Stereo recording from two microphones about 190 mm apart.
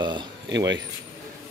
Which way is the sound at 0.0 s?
25° right (ahead or behind).